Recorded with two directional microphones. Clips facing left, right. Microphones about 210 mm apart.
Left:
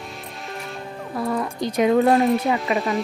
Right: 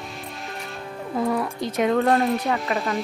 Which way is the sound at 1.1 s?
15° right (ahead or behind).